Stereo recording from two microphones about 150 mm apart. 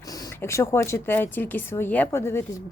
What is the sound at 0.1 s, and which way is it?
A woman's voice, 20° left (ahead or behind).